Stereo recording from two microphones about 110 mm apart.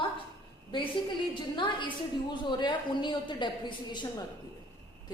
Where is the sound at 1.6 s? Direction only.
45° left (ahead or behind).